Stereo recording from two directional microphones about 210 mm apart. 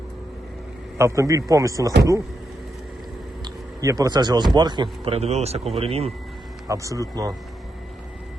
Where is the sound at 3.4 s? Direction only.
15° right (ahead or behind).